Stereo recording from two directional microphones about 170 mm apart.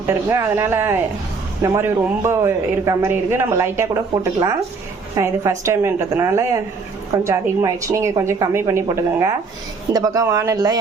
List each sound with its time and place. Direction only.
0.0 s a man's voice: 15° right (ahead or behind)
9.9 s speech: 20° right (ahead or behind)